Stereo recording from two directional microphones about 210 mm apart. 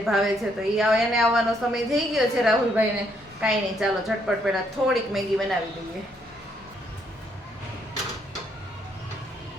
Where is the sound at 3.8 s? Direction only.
5° right (ahead or behind).